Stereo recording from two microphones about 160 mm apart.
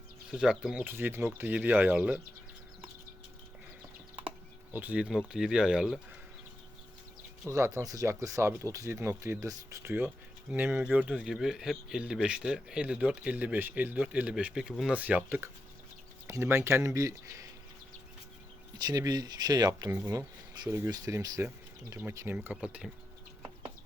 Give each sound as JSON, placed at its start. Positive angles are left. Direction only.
{"t": 0.3, "sound": "speech", "side_deg": -5}
{"t": 4.1, "sound": "speech", "side_deg": -10}
{"t": 7.4, "sound": "speech", "side_deg": -20}
{"t": 18.8, "sound": "speech", "side_deg": -25}